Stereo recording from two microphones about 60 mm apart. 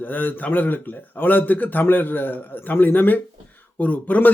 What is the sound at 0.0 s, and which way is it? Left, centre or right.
A man's voice, left.